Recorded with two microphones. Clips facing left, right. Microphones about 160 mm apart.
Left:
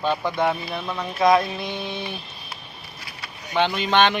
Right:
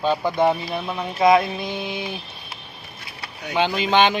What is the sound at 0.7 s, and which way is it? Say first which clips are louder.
Speech: right 2 dB; 15° right (ahead or behind).